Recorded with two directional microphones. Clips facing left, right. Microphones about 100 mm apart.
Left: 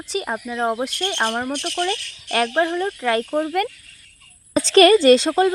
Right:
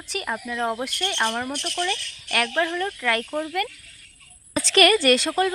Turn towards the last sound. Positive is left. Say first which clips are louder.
# left 6 dB
turn(degrees=25)  # may be behind; listen again after turning